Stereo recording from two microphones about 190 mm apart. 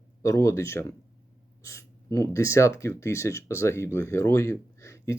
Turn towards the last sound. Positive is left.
turn(degrees=15)  # may be behind; listen again after turning